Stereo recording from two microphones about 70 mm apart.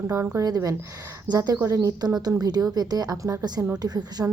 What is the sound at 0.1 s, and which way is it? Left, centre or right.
Speech, right.